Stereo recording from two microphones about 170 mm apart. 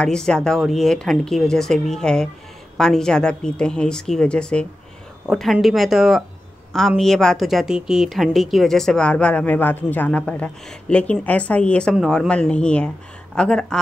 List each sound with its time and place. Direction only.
0.0 s a woman's voice: 5° left (ahead or behind)